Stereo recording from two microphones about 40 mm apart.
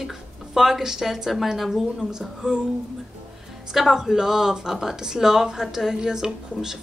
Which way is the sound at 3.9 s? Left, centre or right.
Centre.